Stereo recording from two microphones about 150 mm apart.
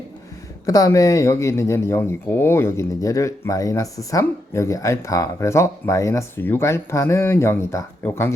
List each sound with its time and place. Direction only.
0.6 s speech: 25° left (ahead or behind)